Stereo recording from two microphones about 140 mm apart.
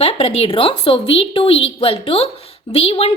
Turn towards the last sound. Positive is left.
turn(degrees=45)  # may be behind; listen again after turning